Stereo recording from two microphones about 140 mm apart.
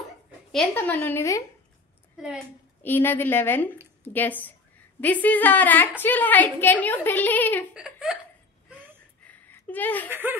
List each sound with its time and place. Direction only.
0.7 s a woman's voice: 15° left (ahead or behind)
2.8 s a woman's voice: 15° left (ahead or behind)
7.7 s speech: 5° right (ahead or behind)
9.3 s a sound: 10° left (ahead or behind)
10.0 s speech: 15° right (ahead or behind)